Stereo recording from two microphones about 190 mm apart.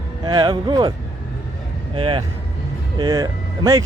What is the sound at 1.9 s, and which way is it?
Speech, 25° right (ahead or behind).